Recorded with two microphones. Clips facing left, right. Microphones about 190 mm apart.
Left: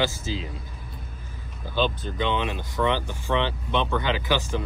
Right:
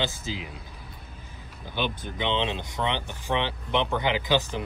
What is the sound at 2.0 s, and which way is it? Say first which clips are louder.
Speech: left 1 dB; 20° right (ahead or behind).